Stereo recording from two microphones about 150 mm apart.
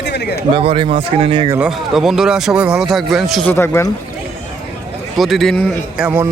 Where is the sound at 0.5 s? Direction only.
35° right (ahead or behind).